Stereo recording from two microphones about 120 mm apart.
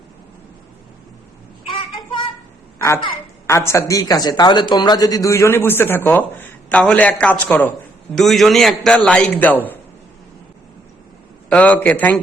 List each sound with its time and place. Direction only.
2.7 s a sound: 20° left (ahead or behind)
3.4 s speech: 20° left (ahead or behind)
8.1 s a man's voice: centre (ahead or behind)
11.4 s a man's voice: 10° left (ahead or behind)